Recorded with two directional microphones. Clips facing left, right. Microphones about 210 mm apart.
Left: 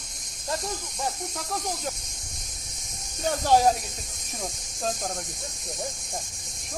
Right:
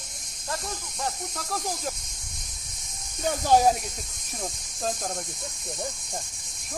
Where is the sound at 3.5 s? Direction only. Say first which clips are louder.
Even; 5° right (ahead or behind).